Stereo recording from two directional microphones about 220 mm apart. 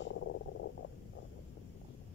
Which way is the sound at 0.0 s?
55° left (ahead or behind).